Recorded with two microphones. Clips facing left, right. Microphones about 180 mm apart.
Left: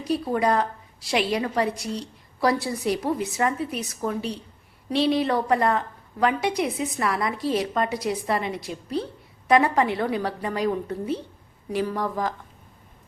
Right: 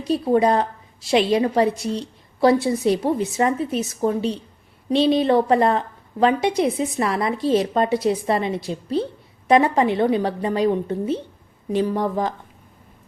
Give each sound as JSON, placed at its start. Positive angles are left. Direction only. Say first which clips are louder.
{"t": 0.1, "sound": "a woman's voice", "louder": "right 5 dB", "side_deg": -25}